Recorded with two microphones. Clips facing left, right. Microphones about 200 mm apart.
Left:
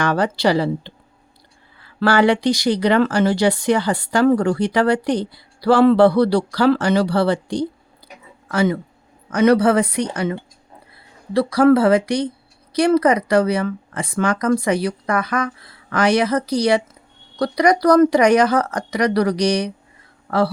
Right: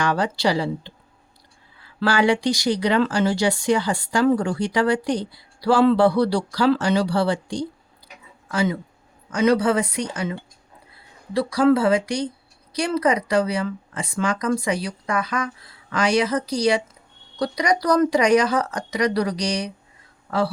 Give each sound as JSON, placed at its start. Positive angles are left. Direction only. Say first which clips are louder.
{"t": 0.0, "sound": "speech", "louder": "left 3 dB", "side_deg": 55}
{"t": 2.0, "sound": "speech", "louder": "left 4 dB", "side_deg": 60}